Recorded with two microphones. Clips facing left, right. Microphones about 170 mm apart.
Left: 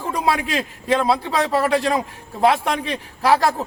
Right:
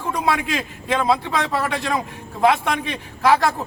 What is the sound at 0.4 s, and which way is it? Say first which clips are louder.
A man's voice: left 2 dB; 35° left (ahead or behind).